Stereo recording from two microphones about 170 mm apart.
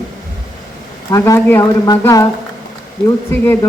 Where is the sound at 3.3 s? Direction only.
15° left (ahead or behind).